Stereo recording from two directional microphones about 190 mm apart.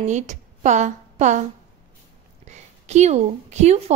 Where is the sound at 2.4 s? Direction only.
35° right (ahead or behind).